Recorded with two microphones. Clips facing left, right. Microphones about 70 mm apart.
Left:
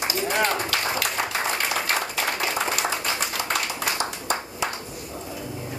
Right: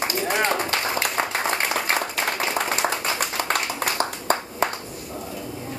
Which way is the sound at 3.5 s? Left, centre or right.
Right.